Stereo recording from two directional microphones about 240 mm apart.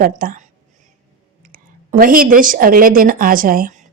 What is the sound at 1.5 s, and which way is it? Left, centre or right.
A woman's voice, right.